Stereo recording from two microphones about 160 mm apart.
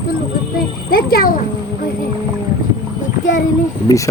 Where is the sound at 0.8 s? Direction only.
70° left (ahead or behind).